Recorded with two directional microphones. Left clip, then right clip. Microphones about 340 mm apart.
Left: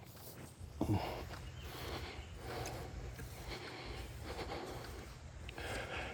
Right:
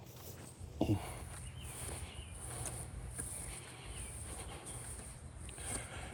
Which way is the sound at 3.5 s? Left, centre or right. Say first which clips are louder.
Left 5 dB; left.